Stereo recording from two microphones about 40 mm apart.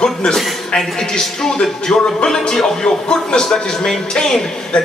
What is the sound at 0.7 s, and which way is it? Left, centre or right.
Speech, centre.